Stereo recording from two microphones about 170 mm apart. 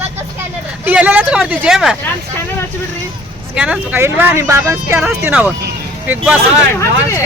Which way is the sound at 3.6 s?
10° right (ahead or behind).